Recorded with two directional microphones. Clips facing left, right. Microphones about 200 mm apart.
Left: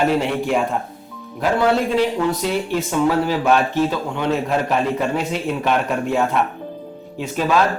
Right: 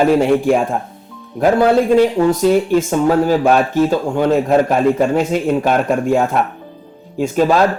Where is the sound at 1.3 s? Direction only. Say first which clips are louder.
Right 6 dB; 45° right (ahead or behind).